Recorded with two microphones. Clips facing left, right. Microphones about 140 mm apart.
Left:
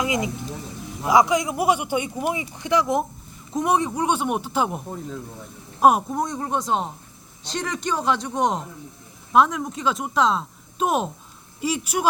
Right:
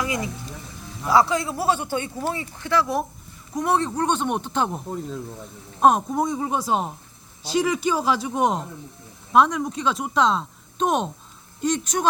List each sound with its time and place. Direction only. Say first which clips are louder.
0.0 s speech: left 3 dB; 20° left (ahead or behind)
5.8 s speech: left 1 dB; 10° left (ahead or behind)
6.1 s speech: right 2 dB; 5° right (ahead or behind)